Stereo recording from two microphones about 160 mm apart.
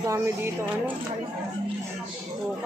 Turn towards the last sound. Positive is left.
turn(degrees=-15)  # may be behind; listen again after turning